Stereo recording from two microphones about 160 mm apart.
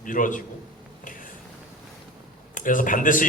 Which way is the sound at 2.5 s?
55° left (ahead or behind).